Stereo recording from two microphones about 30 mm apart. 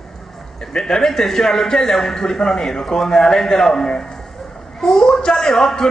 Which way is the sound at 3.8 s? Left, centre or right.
Left.